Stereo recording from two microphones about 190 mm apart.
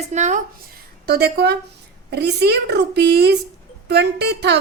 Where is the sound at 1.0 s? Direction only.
55° right (ahead or behind).